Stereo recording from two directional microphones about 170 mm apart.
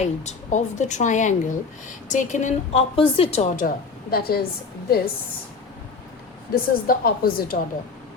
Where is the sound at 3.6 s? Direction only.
60° left (ahead or behind).